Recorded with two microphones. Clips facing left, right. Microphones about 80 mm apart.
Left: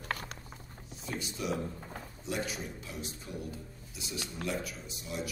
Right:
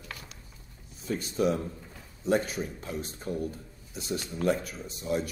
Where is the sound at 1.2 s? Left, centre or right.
Right.